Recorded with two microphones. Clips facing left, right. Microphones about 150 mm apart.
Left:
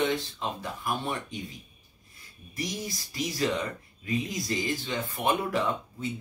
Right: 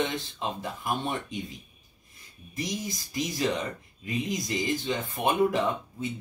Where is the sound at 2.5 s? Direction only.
20° right (ahead or behind).